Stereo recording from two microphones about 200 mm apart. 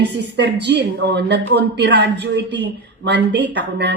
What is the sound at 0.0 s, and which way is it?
A woman's voice, 60° right (ahead or behind).